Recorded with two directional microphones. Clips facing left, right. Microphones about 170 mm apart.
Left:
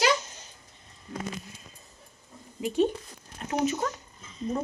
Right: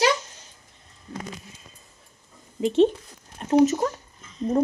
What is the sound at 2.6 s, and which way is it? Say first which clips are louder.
Speech: right 6 dB; 25° right (ahead or behind).